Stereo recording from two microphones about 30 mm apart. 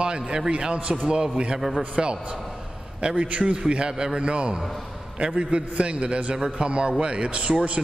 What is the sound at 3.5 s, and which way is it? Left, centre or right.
A man's voice, right.